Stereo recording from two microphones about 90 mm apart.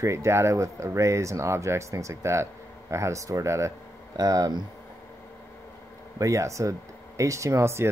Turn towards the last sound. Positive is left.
turn(degrees=-30)  # may be behind; listen again after turning